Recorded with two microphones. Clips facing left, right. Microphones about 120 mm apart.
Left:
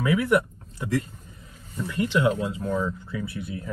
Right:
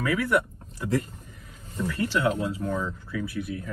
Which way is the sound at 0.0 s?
20° left (ahead or behind).